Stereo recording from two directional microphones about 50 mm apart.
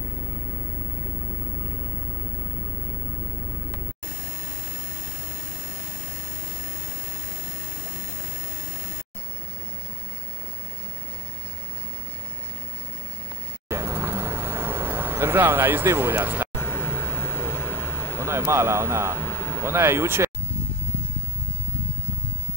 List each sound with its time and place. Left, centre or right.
13.7 s vehicle: right
16.6 s vehicle: left
18.2 s speech: right
19.1 s a sound: left
19.6 s speech: right